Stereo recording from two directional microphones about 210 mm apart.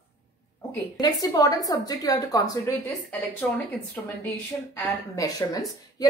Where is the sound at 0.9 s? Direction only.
20° left (ahead or behind).